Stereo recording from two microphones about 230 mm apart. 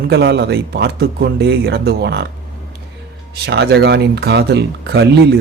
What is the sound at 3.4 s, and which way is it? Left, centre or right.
Speech, right.